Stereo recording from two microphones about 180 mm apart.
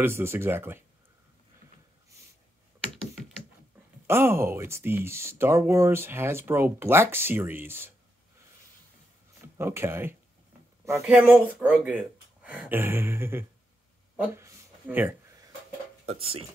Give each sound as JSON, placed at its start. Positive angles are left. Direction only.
{"t": 0.0, "sound": "speech", "side_deg": -15}
{"t": 4.1, "sound": "speech", "side_deg": -15}
{"t": 9.4, "sound": "speech", "side_deg": -15}
{"t": 14.1, "sound": "a sound", "side_deg": -15}
{"t": 16.1, "sound": "speech", "side_deg": -30}